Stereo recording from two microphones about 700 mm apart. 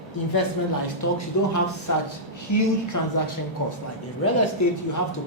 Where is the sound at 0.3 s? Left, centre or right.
Left.